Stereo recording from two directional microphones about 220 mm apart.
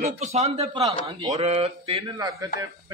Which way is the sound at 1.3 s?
30° right (ahead or behind).